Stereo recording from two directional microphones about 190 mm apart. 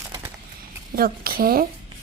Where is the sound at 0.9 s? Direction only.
50° right (ahead or behind).